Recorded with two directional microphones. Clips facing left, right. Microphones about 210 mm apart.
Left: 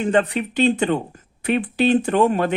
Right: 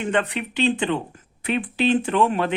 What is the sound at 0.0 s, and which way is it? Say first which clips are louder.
Speech: left 4 dB; 35° left (ahead or behind).